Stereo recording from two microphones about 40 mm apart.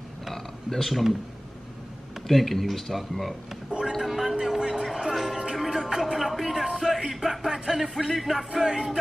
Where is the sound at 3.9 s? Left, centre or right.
Centre.